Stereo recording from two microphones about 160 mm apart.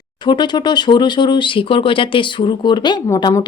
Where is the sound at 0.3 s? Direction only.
25° left (ahead or behind).